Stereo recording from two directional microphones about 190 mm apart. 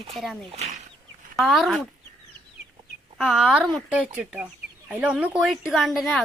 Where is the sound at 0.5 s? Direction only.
35° right (ahead or behind).